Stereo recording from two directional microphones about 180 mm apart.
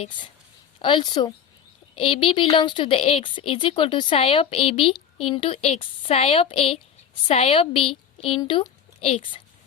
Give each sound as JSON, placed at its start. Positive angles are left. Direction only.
{"t": 0.8, "sound": "a woman's voice", "side_deg": 25}